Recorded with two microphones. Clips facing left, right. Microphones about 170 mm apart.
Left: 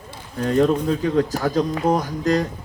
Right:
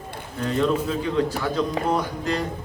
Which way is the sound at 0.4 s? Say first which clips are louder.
Left 4 dB; 40° left (ahead or behind).